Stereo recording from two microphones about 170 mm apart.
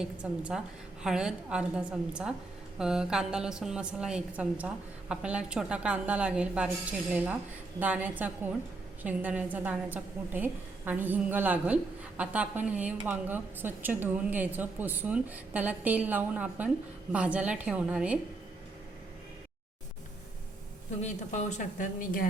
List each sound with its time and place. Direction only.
0.0 s a woman's voice: 5° right (ahead or behind)
21.0 s a woman's voice: 45° left (ahead or behind)